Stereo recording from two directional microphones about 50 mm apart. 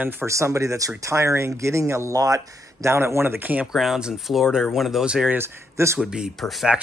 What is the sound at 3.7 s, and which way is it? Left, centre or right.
Speech, centre.